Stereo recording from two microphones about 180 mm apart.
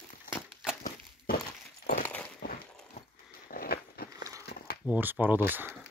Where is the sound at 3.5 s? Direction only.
55° left (ahead or behind).